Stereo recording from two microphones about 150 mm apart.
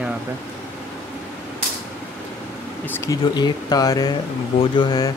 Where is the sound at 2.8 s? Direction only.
15° left (ahead or behind).